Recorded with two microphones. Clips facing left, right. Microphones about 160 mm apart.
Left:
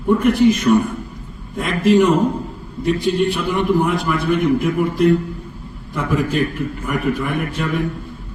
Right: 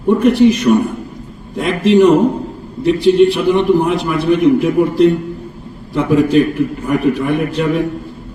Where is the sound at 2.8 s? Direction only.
75° right (ahead or behind).